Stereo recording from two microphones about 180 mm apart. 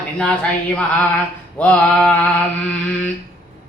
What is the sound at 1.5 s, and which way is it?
Speech, 5° left (ahead or behind).